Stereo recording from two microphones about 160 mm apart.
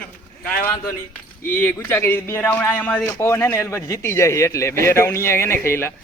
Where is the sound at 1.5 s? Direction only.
10° left (ahead or behind).